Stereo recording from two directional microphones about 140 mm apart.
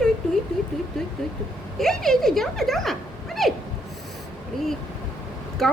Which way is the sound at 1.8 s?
5° left (ahead or behind).